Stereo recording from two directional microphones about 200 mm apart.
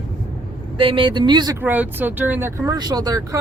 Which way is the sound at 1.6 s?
10° right (ahead or behind).